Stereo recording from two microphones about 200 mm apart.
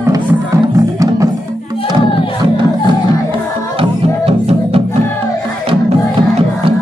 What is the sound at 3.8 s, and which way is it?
Music, 30° right (ahead or behind).